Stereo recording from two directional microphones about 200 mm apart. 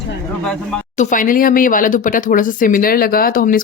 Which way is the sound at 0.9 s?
40° left (ahead or behind).